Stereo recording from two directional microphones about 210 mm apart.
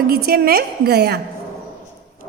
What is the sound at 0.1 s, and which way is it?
A woman's voice, 45° right (ahead or behind).